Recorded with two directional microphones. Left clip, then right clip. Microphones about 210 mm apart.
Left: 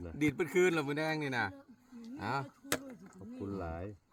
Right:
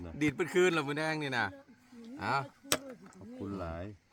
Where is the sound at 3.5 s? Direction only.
45° right (ahead or behind).